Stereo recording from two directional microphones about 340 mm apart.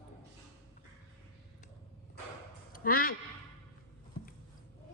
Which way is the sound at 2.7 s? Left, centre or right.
Left.